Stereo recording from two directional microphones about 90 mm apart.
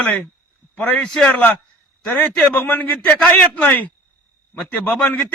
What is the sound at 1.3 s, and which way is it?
A man's voice, 25° left (ahead or behind).